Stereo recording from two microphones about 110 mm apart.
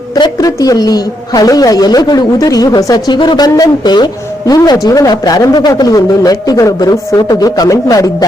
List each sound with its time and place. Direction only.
0.1 s a woman's voice: 35° left (ahead or behind)